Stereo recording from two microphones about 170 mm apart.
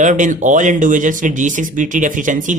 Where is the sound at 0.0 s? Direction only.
45° right (ahead or behind).